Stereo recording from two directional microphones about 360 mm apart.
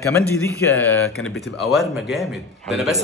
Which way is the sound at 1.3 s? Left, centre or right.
Centre.